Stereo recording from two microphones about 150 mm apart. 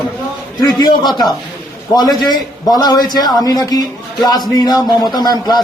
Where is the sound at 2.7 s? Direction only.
25° left (ahead or behind).